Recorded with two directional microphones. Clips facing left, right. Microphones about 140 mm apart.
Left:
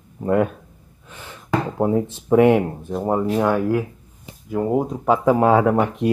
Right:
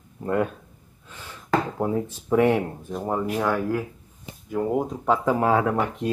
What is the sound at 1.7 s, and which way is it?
Speech, 30° left (ahead or behind).